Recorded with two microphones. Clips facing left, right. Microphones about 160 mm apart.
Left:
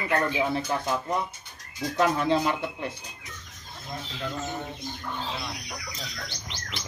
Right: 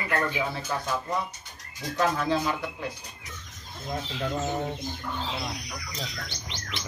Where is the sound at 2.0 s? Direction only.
25° left (ahead or behind).